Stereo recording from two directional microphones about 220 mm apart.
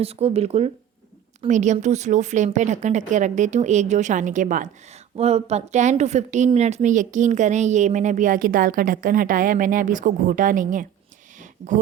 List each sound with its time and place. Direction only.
0.0 s a woman's voice: 25° right (ahead or behind)